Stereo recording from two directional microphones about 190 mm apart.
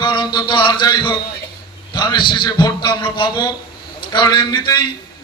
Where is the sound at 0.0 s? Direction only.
25° left (ahead or behind).